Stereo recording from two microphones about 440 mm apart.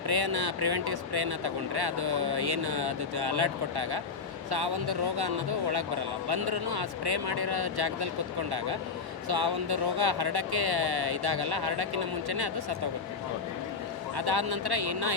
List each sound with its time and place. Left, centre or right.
0.1 s speech: right
14.2 s speech: right